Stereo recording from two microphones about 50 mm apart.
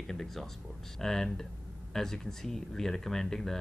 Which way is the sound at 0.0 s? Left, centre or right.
Centre.